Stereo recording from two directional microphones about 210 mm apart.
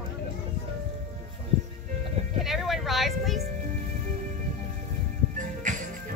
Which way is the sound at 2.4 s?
Centre (ahead or behind).